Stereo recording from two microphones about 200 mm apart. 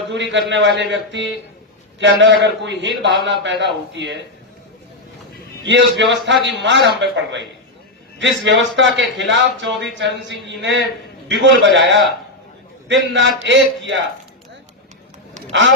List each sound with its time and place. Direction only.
0.1 s a man's voice: 65° right (ahead or behind)
5.6 s a man's voice: 60° right (ahead or behind)